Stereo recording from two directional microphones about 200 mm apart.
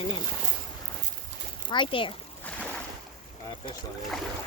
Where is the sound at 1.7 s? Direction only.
25° left (ahead or behind).